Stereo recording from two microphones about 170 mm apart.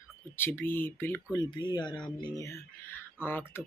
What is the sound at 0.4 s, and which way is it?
Speech, 10° left (ahead or behind).